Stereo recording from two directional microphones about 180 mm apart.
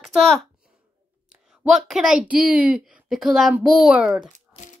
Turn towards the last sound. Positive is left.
turn(degrees=-5)  # may be behind; listen again after turning